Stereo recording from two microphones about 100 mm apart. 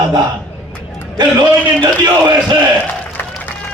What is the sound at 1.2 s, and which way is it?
Speech, 45° right (ahead or behind).